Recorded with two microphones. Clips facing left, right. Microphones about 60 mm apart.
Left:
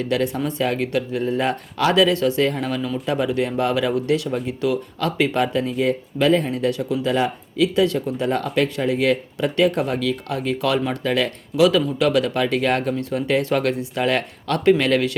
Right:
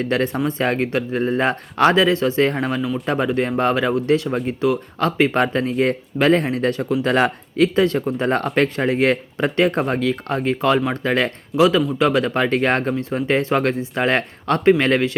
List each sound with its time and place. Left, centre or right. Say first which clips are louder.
0.0 s speech: right 2 dB; right
7.0 s speech: right 4 dB; right